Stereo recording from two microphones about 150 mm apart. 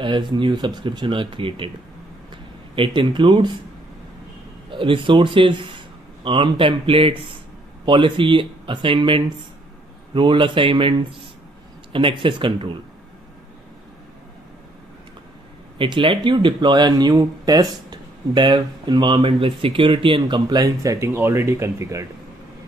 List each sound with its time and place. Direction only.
0.0 s speech: 30° right (ahead or behind)
2.7 s speech: 35° right (ahead or behind)
4.6 s speech: 35° right (ahead or behind)
15.8 s speech: 30° right (ahead or behind)